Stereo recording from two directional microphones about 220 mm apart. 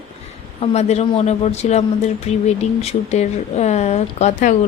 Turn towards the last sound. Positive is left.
turn(degrees=30)  # may be behind; listen again after turning